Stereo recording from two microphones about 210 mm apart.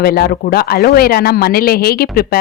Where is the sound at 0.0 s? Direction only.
45° left (ahead or behind).